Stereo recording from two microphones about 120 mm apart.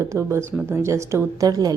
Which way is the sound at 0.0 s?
25° right (ahead or behind).